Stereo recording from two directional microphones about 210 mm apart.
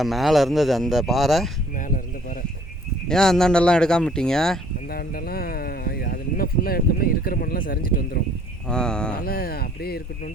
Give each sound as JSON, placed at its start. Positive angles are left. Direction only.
{"t": 0.0, "sound": "speech", "side_deg": 0}
{"t": 3.1, "sound": "speech", "side_deg": 0}
{"t": 4.9, "sound": "speech", "side_deg": 45}
{"t": 8.6, "sound": "speech", "side_deg": 5}
{"t": 9.1, "sound": "speech", "side_deg": 45}